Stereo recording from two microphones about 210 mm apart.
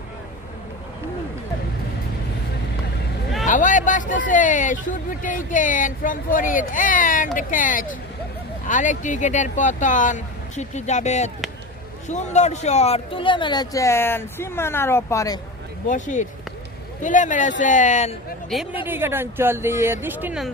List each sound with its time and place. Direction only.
3.4 s a man's voice: 40° left (ahead or behind); by 15.4 s 15° left (ahead or behind)
15.9 s speech: 35° left (ahead or behind)
18.5 s speech: centre (ahead or behind)